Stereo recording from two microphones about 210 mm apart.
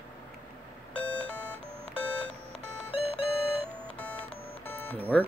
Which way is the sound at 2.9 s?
25° left (ahead or behind).